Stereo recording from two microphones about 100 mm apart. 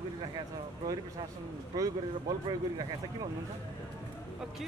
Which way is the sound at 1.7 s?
35° right (ahead or behind).